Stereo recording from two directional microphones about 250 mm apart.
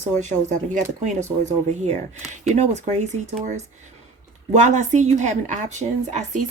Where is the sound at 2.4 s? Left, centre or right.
Right.